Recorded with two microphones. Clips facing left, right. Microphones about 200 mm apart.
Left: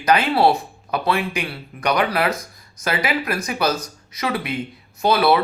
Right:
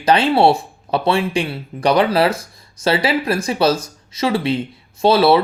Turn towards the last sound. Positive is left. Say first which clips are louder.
# right 4 dB
turn(degrees=-30)  # may be behind; listen again after turning